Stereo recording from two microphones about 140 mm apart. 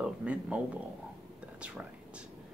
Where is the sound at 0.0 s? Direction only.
10° right (ahead or behind).